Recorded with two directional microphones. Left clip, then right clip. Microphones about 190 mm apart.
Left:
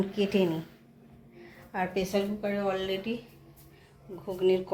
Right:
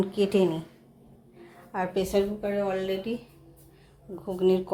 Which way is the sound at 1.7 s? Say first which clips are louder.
Right 3 dB; 15° right (ahead or behind).